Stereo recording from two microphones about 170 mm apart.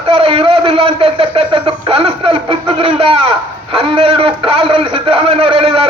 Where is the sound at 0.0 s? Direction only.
35° right (ahead or behind).